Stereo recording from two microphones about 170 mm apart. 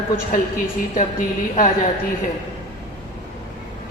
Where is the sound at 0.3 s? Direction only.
55° left (ahead or behind).